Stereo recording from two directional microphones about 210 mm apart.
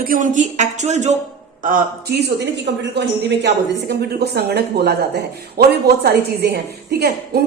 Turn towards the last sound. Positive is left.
turn(degrees=-50)  # may be behind; listen again after turning